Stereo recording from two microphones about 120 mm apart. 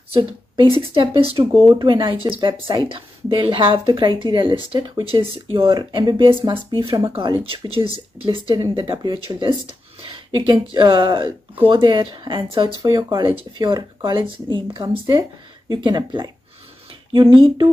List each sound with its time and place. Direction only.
0.1 s speech: 45° right (ahead or behind)
12.8 s speech: 35° right (ahead or behind)